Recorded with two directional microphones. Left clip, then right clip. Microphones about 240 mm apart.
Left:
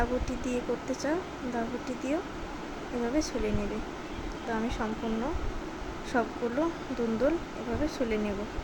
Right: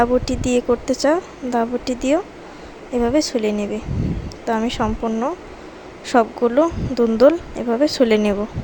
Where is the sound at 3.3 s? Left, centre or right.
Right.